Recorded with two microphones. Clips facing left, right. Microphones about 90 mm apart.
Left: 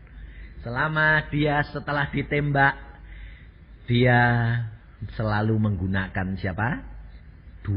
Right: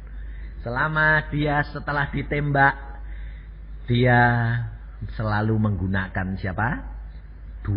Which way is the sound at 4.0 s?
35° right (ahead or behind).